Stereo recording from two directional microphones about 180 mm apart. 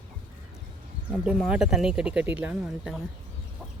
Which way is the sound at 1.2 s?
5° right (ahead or behind).